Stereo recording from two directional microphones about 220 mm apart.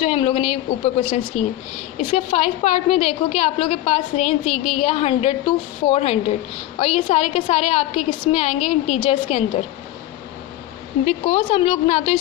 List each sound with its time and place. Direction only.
0.0 s a woman's voice: 25° left (ahead or behind)
11.0 s a woman's voice: 30° left (ahead or behind)